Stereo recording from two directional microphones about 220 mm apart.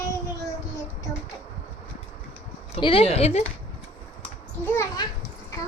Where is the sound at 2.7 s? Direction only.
25° left (ahead or behind).